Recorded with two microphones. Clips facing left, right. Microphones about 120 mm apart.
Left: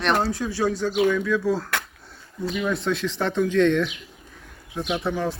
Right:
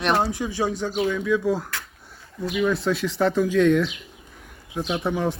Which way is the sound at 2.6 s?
Centre (ahead or behind).